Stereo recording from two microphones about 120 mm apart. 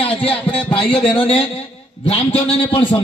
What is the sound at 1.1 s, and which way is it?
A man's voice, 55° left (ahead or behind).